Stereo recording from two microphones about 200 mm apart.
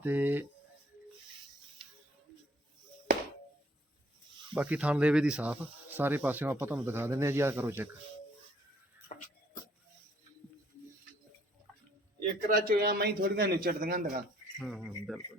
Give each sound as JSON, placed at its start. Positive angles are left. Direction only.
{"t": 0.0, "sound": "speech", "side_deg": -10}
{"t": 4.5, "sound": "speech", "side_deg": -5}
{"t": 12.5, "sound": "a man's voice", "side_deg": -45}
{"t": 14.6, "sound": "speech", "side_deg": 0}